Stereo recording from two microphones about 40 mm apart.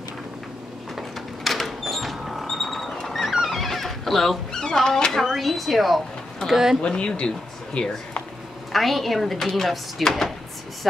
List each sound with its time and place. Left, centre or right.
0.9 s a sound: centre
3.4 s music: centre
4.5 s a sound: centre
5.1 s speech: centre
6.8 s speech: left
8.7 s speech: centre